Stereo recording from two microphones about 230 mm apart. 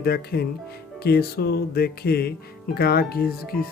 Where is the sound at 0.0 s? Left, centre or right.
Left.